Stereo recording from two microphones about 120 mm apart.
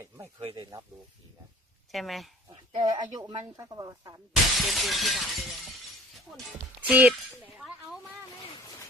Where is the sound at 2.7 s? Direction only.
35° right (ahead or behind).